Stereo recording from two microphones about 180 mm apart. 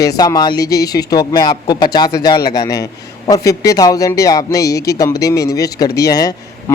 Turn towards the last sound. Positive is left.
turn(degrees=20)  # may be behind; listen again after turning